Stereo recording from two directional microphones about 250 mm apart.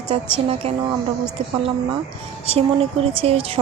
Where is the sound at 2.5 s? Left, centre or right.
Right.